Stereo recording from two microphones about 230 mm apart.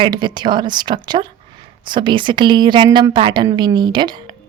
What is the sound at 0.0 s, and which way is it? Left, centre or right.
A woman's voice, centre.